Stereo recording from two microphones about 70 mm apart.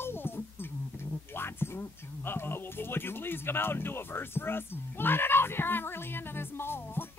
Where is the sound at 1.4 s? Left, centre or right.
Left.